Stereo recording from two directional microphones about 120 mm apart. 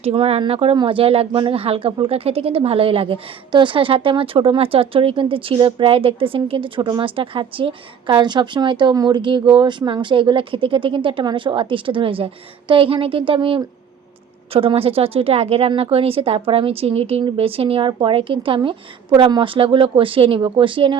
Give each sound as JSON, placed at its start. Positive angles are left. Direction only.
{"t": 0.0, "sound": "speech", "side_deg": -50}